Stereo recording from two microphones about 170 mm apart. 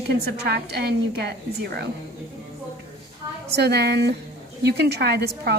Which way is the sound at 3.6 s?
70° right (ahead or behind).